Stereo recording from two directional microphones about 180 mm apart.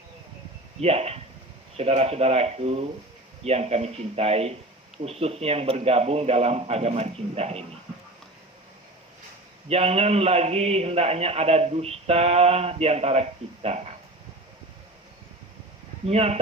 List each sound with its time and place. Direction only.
0.8 s a man's voice: 35° right (ahead or behind)
9.6 s a man's voice: 35° right (ahead or behind)
16.0 s a man's voice: 35° right (ahead or behind)